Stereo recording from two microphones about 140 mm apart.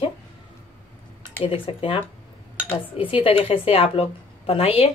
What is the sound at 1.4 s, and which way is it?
Speech, 40° left (ahead or behind).